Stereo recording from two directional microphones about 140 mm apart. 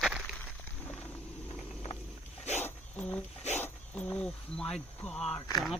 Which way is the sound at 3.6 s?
15° left (ahead or behind).